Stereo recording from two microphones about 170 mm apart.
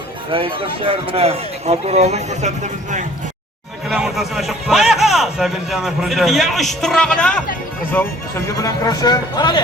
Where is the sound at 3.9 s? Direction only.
Centre (ahead or behind).